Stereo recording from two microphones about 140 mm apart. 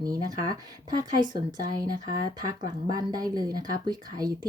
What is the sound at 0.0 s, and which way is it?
Speech, 25° right (ahead or behind).